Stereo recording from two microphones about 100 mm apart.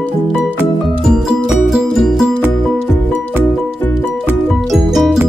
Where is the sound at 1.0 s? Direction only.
Centre (ahead or behind).